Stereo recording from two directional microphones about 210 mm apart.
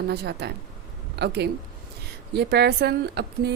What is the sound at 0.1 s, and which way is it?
A woman's voice, 50° right (ahead or behind).